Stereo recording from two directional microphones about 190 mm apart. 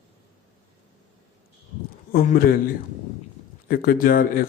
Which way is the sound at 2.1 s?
50° left (ahead or behind).